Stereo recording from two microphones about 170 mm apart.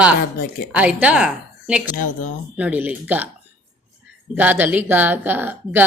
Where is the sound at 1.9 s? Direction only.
50° left (ahead or behind).